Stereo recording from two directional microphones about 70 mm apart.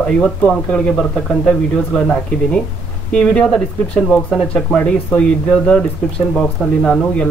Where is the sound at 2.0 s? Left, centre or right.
Centre.